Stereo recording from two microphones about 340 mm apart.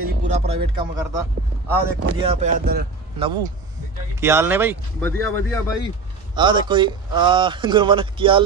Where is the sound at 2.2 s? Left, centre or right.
Centre.